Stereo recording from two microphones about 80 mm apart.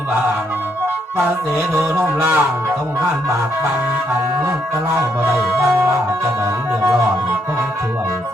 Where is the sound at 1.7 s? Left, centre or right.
Right.